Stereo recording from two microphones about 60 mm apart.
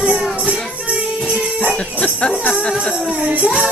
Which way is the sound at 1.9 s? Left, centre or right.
Left.